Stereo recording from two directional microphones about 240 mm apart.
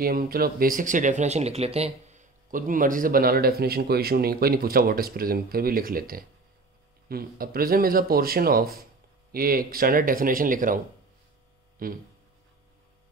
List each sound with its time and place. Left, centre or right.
0.0 s speech: right
11.8 s speech: right